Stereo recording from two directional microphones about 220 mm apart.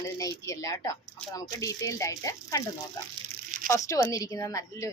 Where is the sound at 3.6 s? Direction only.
15° left (ahead or behind).